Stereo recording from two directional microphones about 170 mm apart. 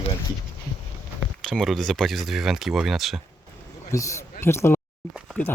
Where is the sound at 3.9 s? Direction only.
20° left (ahead or behind).